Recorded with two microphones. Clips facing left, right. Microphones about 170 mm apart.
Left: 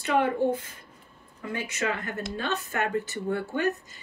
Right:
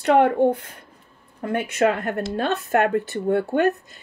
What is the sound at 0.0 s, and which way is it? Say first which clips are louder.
Speech: right 8 dB; 60° right (ahead or behind).